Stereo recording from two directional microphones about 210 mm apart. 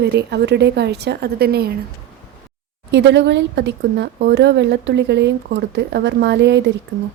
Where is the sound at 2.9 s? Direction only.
55° right (ahead or behind).